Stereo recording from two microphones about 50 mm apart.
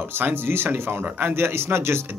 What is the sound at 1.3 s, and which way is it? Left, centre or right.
Speech, right.